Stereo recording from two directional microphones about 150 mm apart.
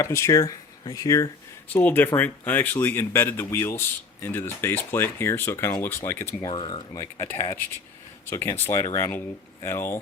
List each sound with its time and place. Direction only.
0.0 s speech: 20° left (ahead or behind)
6.5 s speech: 35° left (ahead or behind)
6.9 s speech: 20° left (ahead or behind)